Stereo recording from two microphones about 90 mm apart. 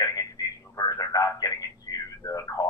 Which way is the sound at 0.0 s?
40° left (ahead or behind).